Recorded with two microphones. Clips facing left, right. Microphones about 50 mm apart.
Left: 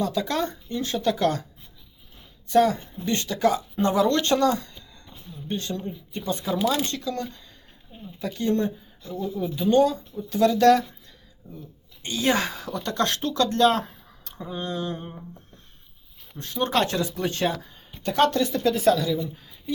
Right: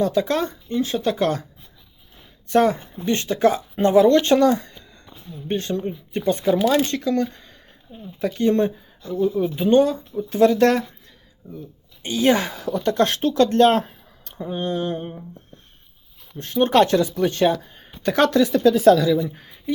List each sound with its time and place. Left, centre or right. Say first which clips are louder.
0.0 s speech: right 5 dB; right
0.7 s speech: right 4 dB; centre
2.5 s speech: right 2 dB; right
12.0 s speech: right 5 dB; right
13.8 s a sound: right 1 dB; right
16.4 s speech: right 7 dB; right
18.0 s a woman's voice: right 3 dB; right
19.3 s speech: right 1 dB; right